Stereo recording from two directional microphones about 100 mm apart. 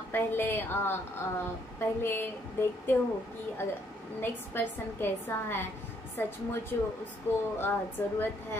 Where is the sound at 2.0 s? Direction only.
20° left (ahead or behind).